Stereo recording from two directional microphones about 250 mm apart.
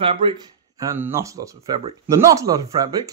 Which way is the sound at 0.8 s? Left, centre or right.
Centre.